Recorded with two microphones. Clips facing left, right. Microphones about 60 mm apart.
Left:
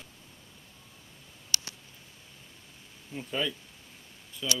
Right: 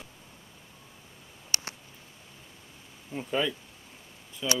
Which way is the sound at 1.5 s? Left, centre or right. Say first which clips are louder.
Right 1 dB; right.